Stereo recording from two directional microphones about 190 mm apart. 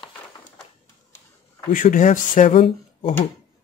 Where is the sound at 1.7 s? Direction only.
40° left (ahead or behind).